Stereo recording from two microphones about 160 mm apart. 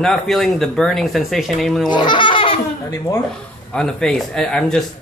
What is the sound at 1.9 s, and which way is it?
Baby laughter, 30° left (ahead or behind).